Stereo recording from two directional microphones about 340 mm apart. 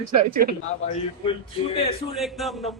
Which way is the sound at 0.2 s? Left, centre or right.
Right.